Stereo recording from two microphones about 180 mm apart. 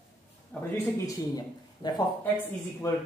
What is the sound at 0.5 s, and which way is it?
Speech, 10° left (ahead or behind).